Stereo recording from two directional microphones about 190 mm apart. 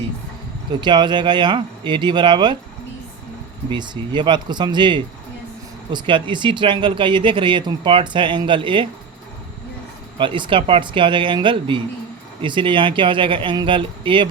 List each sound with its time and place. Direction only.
0.8 s speech: 25° right (ahead or behind)
3.7 s speech: 25° right (ahead or behind)
10.2 s speech: 25° right (ahead or behind)